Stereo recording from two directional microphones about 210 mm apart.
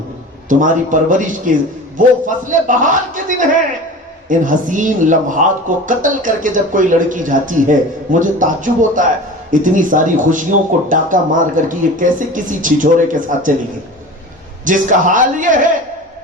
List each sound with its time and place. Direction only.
0.4 s speech: 40° right (ahead or behind)
14.6 s speech: 40° right (ahead or behind)